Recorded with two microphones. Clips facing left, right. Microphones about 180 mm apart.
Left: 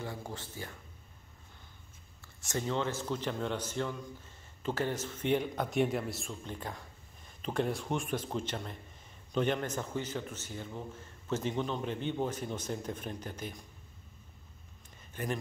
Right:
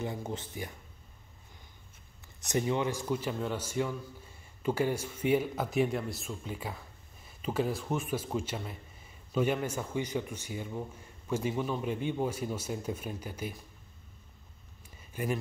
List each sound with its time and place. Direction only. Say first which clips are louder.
0.0 s speech: right 5 dB; 20° right (ahead or behind)
2.2 s a man's voice: right 5 dB; 15° right (ahead or behind)
15.2 s a man's voice: right 3 dB; 10° right (ahead or behind)